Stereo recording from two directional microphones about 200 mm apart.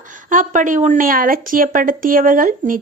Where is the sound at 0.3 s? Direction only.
40° right (ahead or behind).